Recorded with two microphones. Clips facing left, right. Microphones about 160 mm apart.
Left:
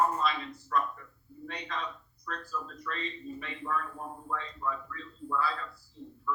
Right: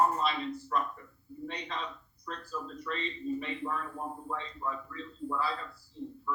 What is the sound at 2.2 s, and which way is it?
Speech, 30° right (ahead or behind).